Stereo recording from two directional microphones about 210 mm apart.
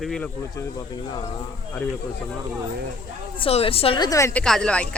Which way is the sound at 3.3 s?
25° left (ahead or behind).